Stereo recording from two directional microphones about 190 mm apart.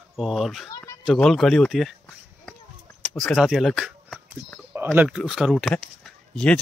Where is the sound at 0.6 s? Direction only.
15° left (ahead or behind).